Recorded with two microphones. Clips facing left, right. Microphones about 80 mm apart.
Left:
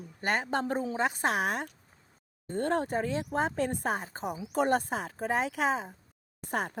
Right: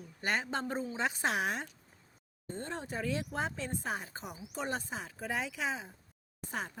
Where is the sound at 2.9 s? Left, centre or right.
Left.